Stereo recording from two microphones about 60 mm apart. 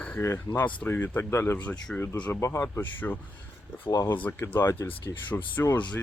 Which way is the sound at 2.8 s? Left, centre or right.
Left.